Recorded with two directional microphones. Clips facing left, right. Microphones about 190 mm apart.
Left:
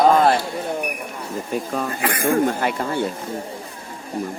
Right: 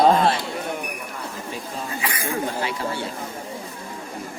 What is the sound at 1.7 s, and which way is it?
Speech, 55° left (ahead or behind).